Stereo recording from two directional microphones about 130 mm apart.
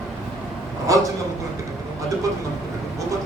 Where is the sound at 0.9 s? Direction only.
25° right (ahead or behind).